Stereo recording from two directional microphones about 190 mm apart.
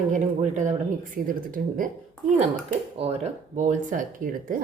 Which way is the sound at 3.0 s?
35° right (ahead or behind).